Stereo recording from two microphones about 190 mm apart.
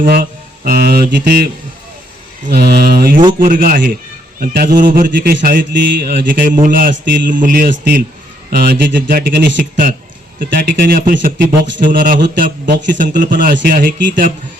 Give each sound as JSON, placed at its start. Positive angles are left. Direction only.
{"t": 0.0, "sound": "speech", "side_deg": -50}
{"t": 2.5, "sound": "speech", "side_deg": -55}